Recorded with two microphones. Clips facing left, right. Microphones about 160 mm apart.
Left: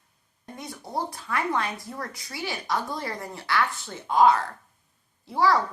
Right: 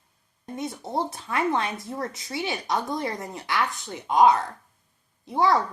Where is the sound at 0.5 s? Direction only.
20° right (ahead or behind).